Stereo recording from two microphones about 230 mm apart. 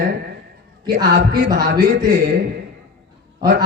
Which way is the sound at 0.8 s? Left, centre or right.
Right.